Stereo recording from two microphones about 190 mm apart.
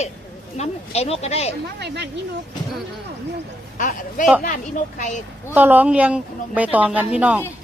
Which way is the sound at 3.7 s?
45° left (ahead or behind).